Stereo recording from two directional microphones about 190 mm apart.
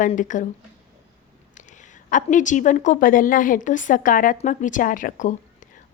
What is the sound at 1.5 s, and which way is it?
A woman's voice, 40° left (ahead or behind).